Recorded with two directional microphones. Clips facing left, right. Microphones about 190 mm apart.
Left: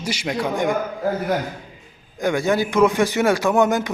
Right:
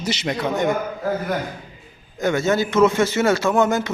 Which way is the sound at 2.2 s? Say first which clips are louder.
Even; 15° left (ahead or behind).